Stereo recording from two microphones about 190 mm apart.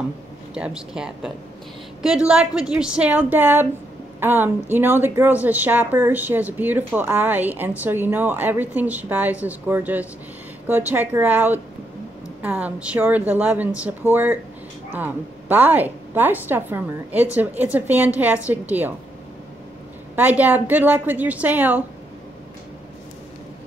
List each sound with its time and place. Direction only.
0.6 s a woman's voice: 5° right (ahead or behind)
20.2 s a woman's voice: 10° right (ahead or behind)